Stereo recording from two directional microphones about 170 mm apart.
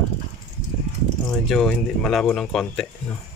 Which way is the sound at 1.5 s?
Centre (ahead or behind).